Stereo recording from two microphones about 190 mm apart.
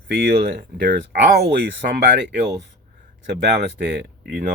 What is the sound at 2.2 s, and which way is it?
Speech, 65° right (ahead or behind).